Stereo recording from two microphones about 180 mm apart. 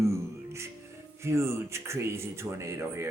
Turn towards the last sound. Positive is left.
turn(degrees=-15)  # may be behind; listen again after turning